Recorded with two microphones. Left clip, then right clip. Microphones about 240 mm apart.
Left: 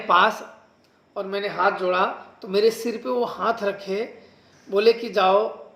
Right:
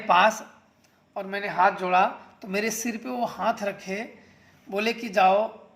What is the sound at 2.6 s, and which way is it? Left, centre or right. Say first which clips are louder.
Speech: left 8 dB; right.